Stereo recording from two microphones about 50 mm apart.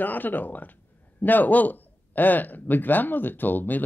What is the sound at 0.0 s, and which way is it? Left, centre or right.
Speech, left.